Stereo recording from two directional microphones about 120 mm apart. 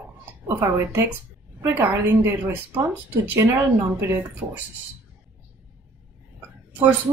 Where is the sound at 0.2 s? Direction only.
20° right (ahead or behind).